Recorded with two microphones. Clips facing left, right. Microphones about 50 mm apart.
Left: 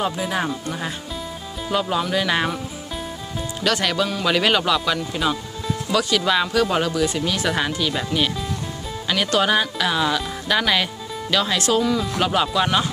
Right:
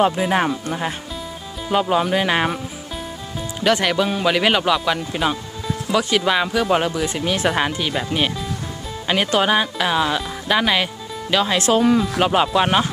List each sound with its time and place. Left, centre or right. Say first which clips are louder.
0.0 s speech: right 6 dB; right
3.6 s speech: right 3 dB; right
11.6 s speech: right 4 dB; right
12.0 s speech: right 3 dB; centre